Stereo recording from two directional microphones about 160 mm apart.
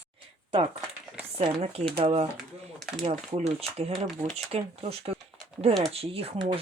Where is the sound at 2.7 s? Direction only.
5° left (ahead or behind).